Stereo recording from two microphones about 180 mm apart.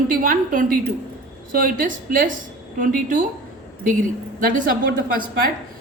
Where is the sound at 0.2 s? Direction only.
50° right (ahead or behind).